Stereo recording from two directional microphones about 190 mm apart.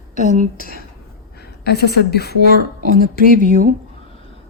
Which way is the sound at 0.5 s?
50° left (ahead or behind).